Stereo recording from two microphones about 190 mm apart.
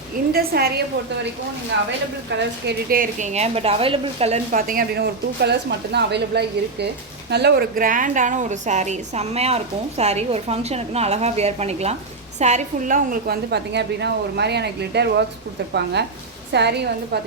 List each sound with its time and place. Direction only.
0.3 s a woman's voice: 55° right (ahead or behind)
2.4 s a woman's voice: 55° right (ahead or behind); by 4.6 s 35° right (ahead or behind)
4.6 s a woman's voice: 50° right (ahead or behind)